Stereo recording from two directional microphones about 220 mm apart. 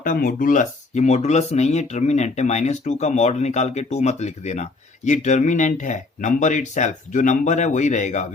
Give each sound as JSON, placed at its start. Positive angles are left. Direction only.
{"t": 0.0, "sound": "speech", "side_deg": 40}